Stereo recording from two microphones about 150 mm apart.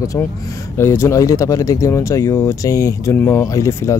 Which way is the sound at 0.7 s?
15° left (ahead or behind).